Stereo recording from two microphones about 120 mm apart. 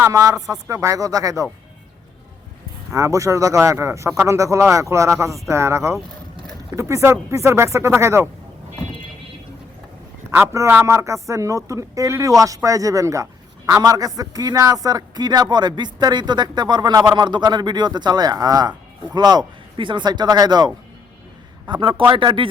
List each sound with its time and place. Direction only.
0.0 s speech: 30° right (ahead or behind)
2.9 s speech: 25° right (ahead or behind)
10.3 s a man's voice: 20° right (ahead or behind)
21.7 s speech: 45° right (ahead or behind)